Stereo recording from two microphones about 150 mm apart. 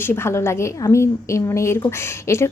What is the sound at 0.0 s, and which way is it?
A woman's voice, 15° left (ahead or behind).